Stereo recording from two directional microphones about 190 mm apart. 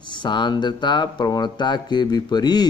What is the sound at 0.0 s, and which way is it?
Speech, 25° left (ahead or behind).